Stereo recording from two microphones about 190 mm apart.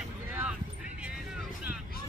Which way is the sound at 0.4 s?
5° right (ahead or behind).